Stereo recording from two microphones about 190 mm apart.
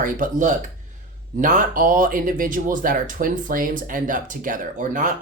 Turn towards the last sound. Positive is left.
turn(degrees=-45)  # may be behind; listen again after turning